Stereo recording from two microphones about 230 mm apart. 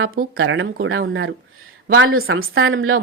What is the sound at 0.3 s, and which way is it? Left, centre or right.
A woman's voice, right.